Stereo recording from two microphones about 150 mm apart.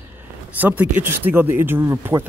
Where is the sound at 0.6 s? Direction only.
10° right (ahead or behind).